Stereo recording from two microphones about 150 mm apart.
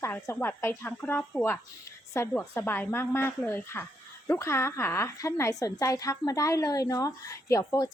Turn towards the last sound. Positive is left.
turn(degrees=25)  # may be behind; listen again after turning